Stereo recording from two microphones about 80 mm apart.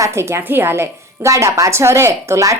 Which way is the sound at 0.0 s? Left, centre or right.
Right.